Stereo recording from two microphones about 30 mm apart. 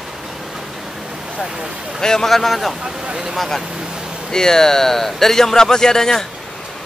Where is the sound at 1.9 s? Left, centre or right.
Centre.